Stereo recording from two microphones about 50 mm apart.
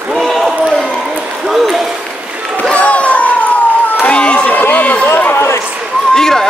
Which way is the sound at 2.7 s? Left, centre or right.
Left.